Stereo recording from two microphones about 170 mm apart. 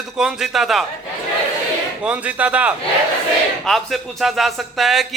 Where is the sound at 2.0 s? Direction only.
10° right (ahead or behind).